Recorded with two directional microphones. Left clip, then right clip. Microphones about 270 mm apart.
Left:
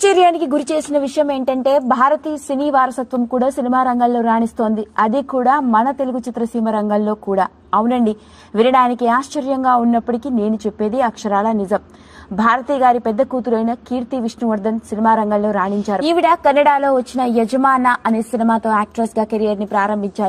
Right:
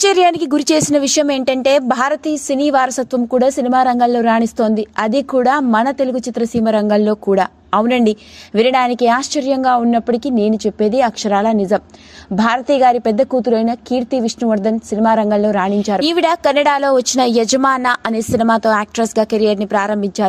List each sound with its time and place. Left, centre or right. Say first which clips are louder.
0.0 s speech: even; right
19.5 s a woman's voice: right 2 dB; right